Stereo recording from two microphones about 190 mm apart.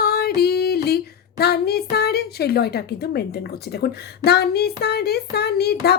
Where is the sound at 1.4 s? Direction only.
55° left (ahead or behind).